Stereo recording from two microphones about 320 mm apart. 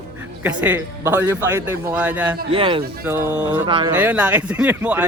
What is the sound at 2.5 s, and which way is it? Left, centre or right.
A man's voice, centre.